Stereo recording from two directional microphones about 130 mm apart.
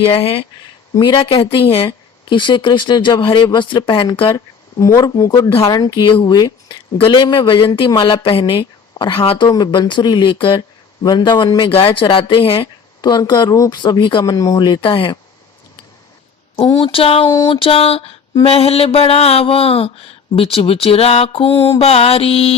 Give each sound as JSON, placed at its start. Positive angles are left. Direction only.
{"t": 0.0, "sound": "mantra", "side_deg": 45}
{"t": 0.9, "sound": "mantra", "side_deg": 35}
{"t": 2.3, "sound": "speech", "side_deg": 40}
{"t": 4.9, "sound": "speech", "side_deg": 30}
{"t": 9.5, "sound": "speech", "side_deg": 30}
{"t": 14.3, "sound": "speech", "side_deg": 30}
{"t": 16.8, "sound": "mantra", "side_deg": 45}